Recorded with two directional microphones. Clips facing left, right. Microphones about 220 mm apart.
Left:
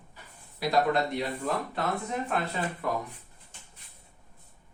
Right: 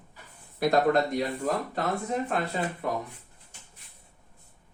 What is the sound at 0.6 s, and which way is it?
Speech, 45° right (ahead or behind).